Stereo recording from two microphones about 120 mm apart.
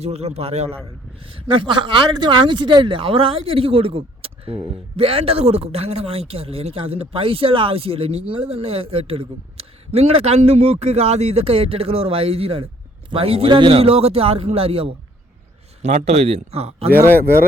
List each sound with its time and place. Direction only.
0.0 s a man's voice: 60° right (ahead or behind)
1.3 s speech: 45° right (ahead or behind)
15.8 s a man's voice: 70° right (ahead or behind)